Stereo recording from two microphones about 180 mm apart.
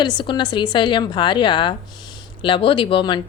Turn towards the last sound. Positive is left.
turn(degrees=30)  # may be behind; listen again after turning